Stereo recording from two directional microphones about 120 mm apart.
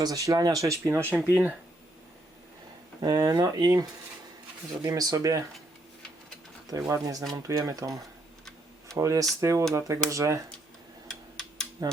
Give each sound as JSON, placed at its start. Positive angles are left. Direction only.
{"t": 0.0, "sound": "speech", "side_deg": -30}
{"t": 3.0, "sound": "speech", "side_deg": -30}
{"t": 6.7, "sound": "speech", "side_deg": -25}
{"t": 11.8, "sound": "speech", "side_deg": -25}